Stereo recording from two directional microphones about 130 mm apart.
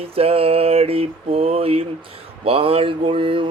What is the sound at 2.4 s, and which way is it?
Speech, 45° right (ahead or behind).